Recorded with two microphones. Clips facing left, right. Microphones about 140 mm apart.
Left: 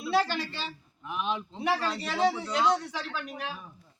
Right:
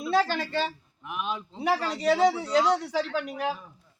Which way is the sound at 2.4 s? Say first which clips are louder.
Right 3 dB; 35° right (ahead or behind).